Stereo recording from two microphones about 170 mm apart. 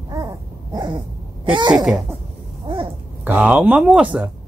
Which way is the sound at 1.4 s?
30° right (ahead or behind).